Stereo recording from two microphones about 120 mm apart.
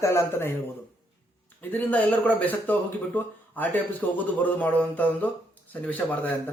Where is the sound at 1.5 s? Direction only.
10° left (ahead or behind).